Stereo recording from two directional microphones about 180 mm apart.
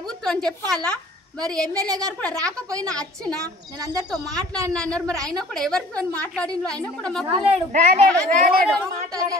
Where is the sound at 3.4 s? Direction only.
20° right (ahead or behind).